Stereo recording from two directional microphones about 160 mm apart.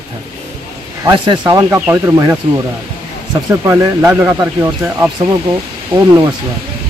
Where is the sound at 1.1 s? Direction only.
30° right (ahead or behind).